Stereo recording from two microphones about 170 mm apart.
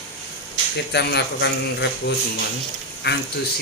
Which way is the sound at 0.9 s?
80° left.